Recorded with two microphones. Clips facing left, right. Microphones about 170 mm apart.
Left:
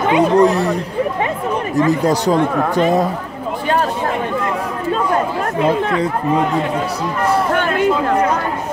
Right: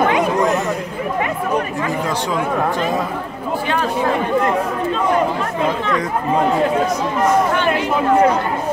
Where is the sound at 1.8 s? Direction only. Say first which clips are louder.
Left 6 dB; 35° left (ahead or behind).